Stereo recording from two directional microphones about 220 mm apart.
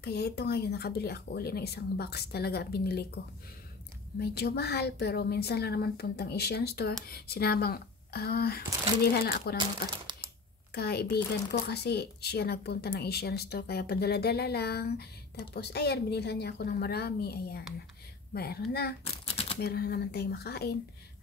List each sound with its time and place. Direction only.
0.0 s speech: 50° left (ahead or behind)
4.2 s speech: 45° left (ahead or behind)
10.7 s speech: 45° left (ahead or behind)
19.2 s typewriter: 25° left (ahead or behind)
19.6 s speech: 45° left (ahead or behind)